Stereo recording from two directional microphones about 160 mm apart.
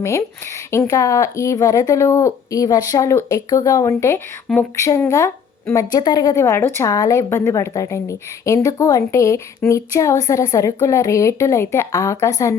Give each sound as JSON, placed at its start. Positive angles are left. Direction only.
{"t": 0.0, "sound": "a woman's voice", "side_deg": 15}